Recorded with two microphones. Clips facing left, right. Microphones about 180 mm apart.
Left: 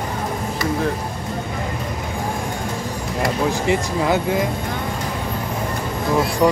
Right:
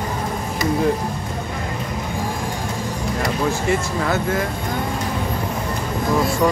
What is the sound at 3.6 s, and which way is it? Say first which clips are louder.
Speech: left 2 dB; 15° left (ahead or behind).